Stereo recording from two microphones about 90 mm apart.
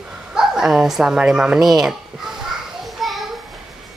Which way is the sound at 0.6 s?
5° right (ahead or behind).